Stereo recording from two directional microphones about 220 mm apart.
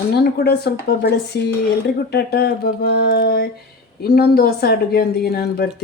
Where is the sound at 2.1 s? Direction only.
50° left (ahead or behind).